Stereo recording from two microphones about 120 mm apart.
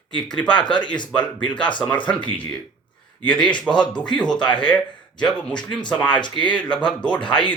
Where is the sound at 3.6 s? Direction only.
5° left (ahead or behind).